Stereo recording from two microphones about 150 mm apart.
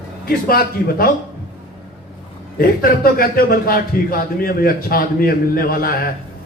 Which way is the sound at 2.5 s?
80° left.